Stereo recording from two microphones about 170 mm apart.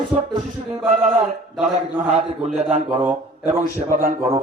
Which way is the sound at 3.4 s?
50° right (ahead or behind).